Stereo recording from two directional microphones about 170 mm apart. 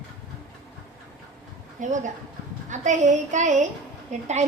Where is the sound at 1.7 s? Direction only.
45° right (ahead or behind).